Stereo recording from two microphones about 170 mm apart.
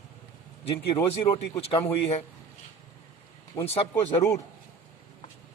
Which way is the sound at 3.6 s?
20° left (ahead or behind).